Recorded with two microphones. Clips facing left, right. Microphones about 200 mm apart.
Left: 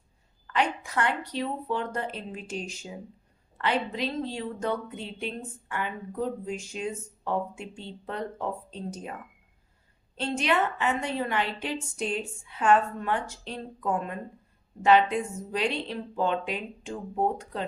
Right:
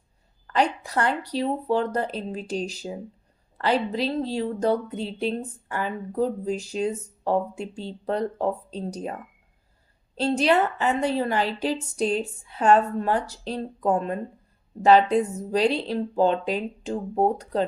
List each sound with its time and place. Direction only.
0.4 s speech: 35° right (ahead or behind)
10.2 s speech: 35° right (ahead or behind)